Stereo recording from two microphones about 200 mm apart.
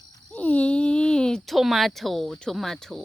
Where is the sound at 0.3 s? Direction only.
5° left (ahead or behind).